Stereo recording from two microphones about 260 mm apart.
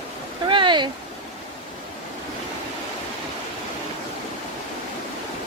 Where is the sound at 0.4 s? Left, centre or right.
Centre.